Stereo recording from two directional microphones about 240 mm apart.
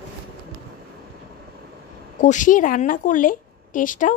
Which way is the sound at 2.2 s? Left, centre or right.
Left.